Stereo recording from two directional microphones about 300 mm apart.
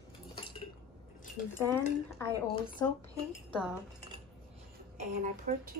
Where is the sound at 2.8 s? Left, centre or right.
Centre.